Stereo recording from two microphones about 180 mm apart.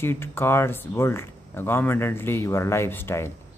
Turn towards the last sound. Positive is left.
turn(degrees=15)  # may be behind; listen again after turning